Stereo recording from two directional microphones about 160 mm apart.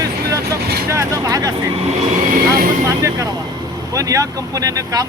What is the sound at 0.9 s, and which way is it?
Speech, 20° right (ahead or behind).